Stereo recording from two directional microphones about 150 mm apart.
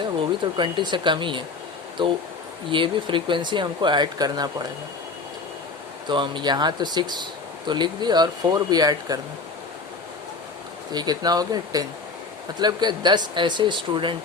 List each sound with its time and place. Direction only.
0.5 s speech: 30° right (ahead or behind)
6.1 s speech: 30° right (ahead or behind)
10.9 s speech: 25° right (ahead or behind)